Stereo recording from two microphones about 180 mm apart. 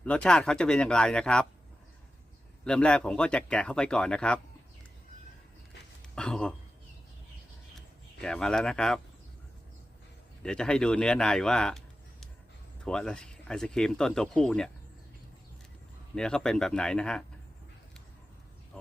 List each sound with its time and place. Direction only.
0.0 s speech: 5° left (ahead or behind)
2.6 s speech: 5° left (ahead or behind)
6.0 s a sound: 5° left (ahead or behind)
7.8 s speech: 5° left (ahead or behind)
10.4 s speech: 5° left (ahead or behind)
12.8 s speech: 5° left (ahead or behind)
16.1 s speech: 5° left (ahead or behind)